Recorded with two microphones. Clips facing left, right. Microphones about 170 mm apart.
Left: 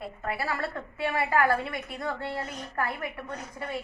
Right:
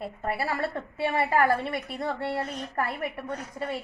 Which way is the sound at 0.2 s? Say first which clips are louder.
Right 2 dB; 30° right (ahead or behind).